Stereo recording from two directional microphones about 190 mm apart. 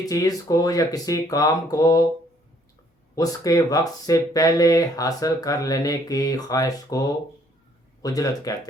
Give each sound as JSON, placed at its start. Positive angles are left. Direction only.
{"t": 0.0, "sound": "speech", "side_deg": 20}
{"t": 3.2, "sound": "speech", "side_deg": 20}